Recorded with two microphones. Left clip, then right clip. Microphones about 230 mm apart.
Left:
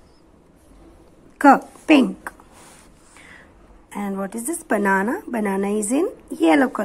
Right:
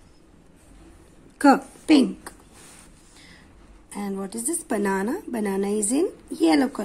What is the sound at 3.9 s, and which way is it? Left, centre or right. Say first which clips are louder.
A woman's voice: left 4 dB; centre.